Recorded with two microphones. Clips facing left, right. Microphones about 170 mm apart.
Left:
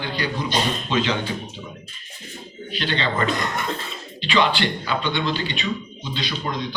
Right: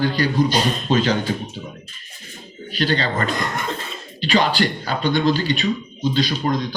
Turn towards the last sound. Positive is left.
turn(degrees=-40)  # may be behind; listen again after turning